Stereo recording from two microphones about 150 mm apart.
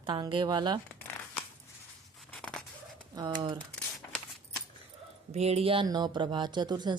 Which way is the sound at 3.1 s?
35° right (ahead or behind).